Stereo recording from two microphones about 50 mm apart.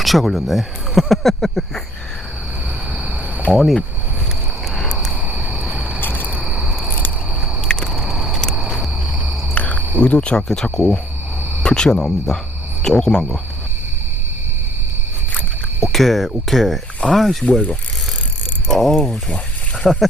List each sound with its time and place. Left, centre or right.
0.0 s speech: centre
3.5 s speech: centre
4.7 s a sound: centre
5.3 s cricket: right
6.0 s cricket: left
6.4 s cricket: centre
7.6 s a sound: centre
7.9 s a sound: centre
9.6 s cricket: left
10.0 s speech: left
15.9 s speech: centre
17.4 s speech: left
18.7 s speech: centre
19.9 s speech: centre